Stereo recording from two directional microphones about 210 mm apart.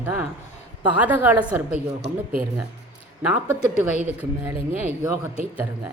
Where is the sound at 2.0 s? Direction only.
40° right (ahead or behind).